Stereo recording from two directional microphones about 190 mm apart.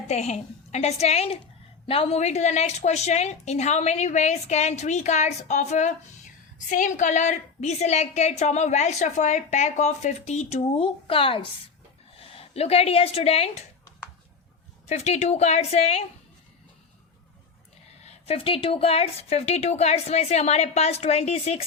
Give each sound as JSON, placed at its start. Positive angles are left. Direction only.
{"t": 0.1, "sound": "a woman's voice", "side_deg": 35}
{"t": 14.8, "sound": "a woman's voice", "side_deg": 35}
{"t": 18.0, "sound": "a woman's voice", "side_deg": 35}